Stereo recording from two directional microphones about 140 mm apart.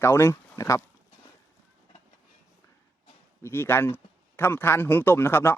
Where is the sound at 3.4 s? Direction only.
15° left (ahead or behind).